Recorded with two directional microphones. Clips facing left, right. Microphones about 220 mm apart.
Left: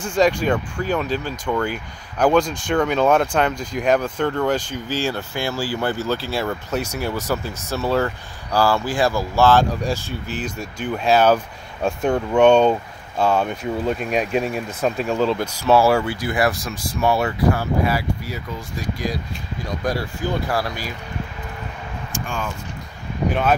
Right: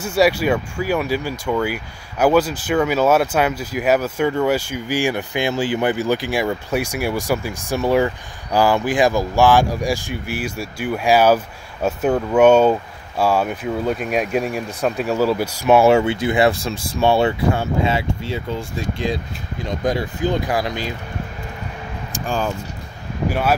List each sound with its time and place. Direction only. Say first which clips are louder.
0.0 s speech: right 2 dB; 10° right (ahead or behind)
22.1 s speech: right 6 dB; 35° right (ahead or behind)